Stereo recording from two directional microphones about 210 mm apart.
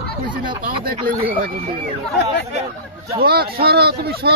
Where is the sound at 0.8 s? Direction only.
45° right (ahead or behind).